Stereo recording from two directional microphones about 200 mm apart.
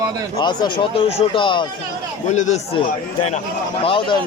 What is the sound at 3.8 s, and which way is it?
Speech, 25° left (ahead or behind).